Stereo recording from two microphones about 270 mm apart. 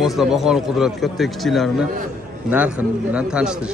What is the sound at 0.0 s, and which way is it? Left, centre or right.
A man's voice, centre.